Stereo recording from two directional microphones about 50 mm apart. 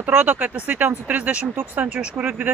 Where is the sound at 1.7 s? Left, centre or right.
Right.